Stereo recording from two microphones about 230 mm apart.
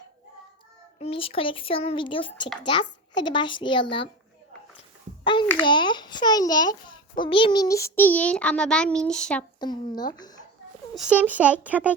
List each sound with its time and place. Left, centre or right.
0.9 s a child's voice: left
5.2 s a sound: left
5.6 s a child's voice: centre
9.6 s a child's voice: centre
10.9 s speech: centre